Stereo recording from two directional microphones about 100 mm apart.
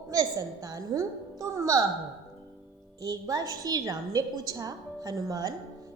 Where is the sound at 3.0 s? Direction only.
40° right (ahead or behind).